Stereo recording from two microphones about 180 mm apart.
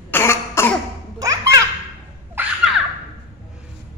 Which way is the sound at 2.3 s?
5° right (ahead or behind).